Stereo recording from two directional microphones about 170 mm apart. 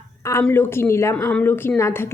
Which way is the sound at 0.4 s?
10° left (ahead or behind).